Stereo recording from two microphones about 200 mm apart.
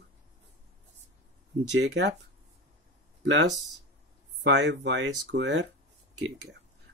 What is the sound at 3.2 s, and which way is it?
Speech, 60° right (ahead or behind).